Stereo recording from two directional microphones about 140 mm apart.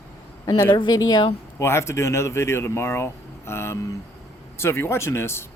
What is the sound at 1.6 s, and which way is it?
A man's voice, 20° left (ahead or behind).